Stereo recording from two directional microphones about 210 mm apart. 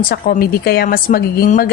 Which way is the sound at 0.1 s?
45° left (ahead or behind).